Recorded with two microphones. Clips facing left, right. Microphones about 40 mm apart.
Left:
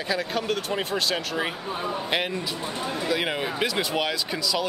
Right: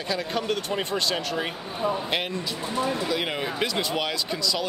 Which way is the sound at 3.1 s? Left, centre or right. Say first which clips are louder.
Left 1 dB; centre.